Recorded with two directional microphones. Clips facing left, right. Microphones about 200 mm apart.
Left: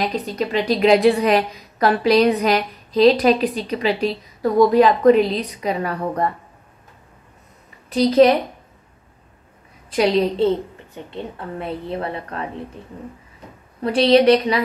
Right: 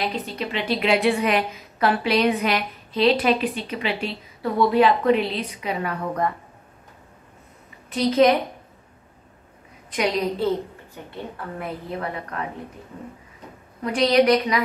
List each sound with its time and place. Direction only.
0.4 s a woman's voice: 40° left (ahead or behind)
7.9 s a woman's voice: 35° left (ahead or behind)
9.9 s a woman's voice: 30° left (ahead or behind)
13.8 s a woman's voice: 30° left (ahead or behind)